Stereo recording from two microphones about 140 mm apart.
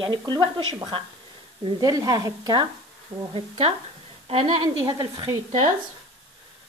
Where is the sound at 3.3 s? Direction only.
45° right (ahead or behind); by 5.4 s 25° right (ahead or behind).